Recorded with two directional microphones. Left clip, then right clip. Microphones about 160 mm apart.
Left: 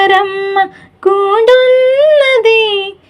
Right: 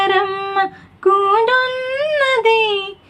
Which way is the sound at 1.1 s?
35° left (ahead or behind).